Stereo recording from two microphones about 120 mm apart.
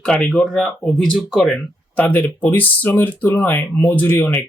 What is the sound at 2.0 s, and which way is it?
Speech, 15° left (ahead or behind).